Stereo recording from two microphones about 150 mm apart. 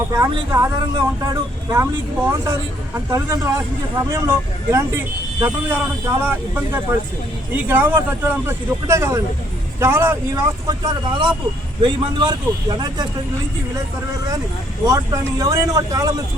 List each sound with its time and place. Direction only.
0.5 s speech: 20° right (ahead or behind)
14.8 s speech: 25° right (ahead or behind)